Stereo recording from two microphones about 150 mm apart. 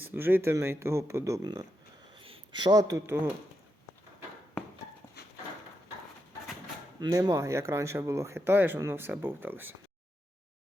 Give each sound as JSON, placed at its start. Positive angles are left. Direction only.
{"t": 0.0, "sound": "speech", "side_deg": -15}
{"t": 2.1, "sound": "a sound", "side_deg": -35}
{"t": 7.0, "sound": "speech", "side_deg": -25}